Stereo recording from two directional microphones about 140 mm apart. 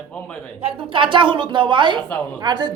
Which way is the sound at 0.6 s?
35° right (ahead or behind).